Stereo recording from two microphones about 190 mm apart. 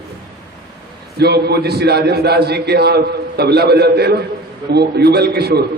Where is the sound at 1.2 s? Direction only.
60° right (ahead or behind).